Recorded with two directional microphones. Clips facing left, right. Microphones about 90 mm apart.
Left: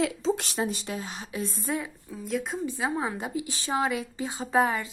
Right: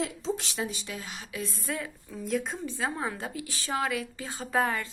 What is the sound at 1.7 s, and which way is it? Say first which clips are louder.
Speech: left 3 dB; 20° left (ahead or behind).